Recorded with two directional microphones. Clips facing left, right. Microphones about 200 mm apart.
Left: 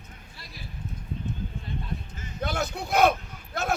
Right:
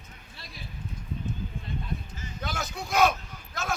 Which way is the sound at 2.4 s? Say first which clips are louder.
Left 5 dB; 55° left (ahead or behind).